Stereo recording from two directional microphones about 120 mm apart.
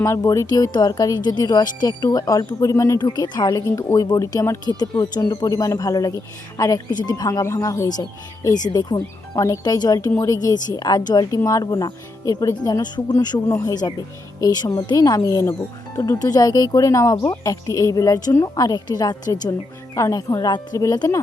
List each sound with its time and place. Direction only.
0.0 s speech: 25° left (ahead or behind)
5.1 s speech: 35° left (ahead or behind)